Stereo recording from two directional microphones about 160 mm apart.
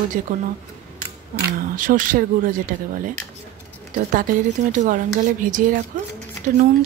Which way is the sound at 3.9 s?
55° right (ahead or behind).